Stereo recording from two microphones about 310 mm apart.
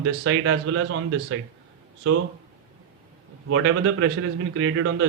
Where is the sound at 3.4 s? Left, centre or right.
Right.